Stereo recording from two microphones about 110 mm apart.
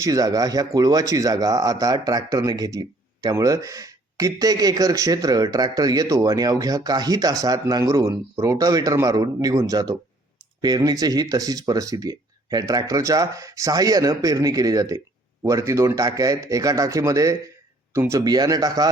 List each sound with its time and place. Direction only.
0.0 s speech: 35° right (ahead or behind)
18.2 s speech: 35° right (ahead or behind)